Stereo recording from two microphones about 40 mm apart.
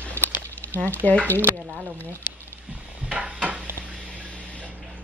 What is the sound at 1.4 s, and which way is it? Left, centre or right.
Speech, right.